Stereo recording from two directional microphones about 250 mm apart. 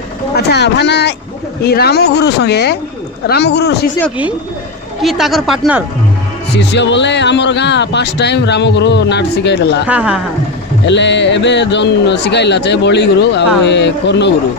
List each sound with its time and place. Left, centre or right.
0.5 s a man's voice: left
5.0 s speech: centre
6.7 s a man's voice: left
9.8 s speech: centre
10.9 s a man's voice: left